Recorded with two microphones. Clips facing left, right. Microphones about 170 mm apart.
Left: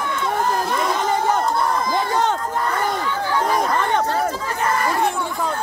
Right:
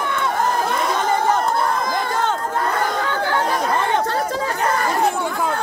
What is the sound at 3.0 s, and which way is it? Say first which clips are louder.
Chatter: right 2 dB; 65° right (ahead or behind).